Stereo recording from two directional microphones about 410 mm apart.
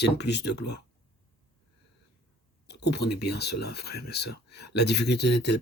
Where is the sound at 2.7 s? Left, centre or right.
Left.